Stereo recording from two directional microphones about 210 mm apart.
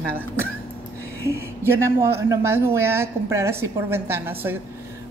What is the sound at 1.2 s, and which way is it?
Speech, 10° right (ahead or behind).